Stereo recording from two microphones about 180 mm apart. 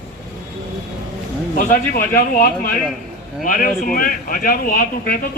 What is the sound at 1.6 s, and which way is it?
Speech, 50° left (ahead or behind).